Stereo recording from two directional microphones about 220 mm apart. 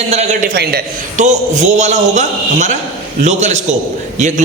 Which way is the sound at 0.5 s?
50° right (ahead or behind).